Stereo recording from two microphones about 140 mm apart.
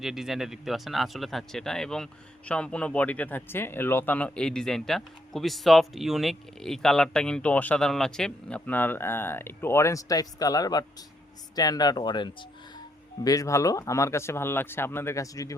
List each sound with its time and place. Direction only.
0.0 s speech: centre (ahead or behind); by 15.5 s 25° left (ahead or behind)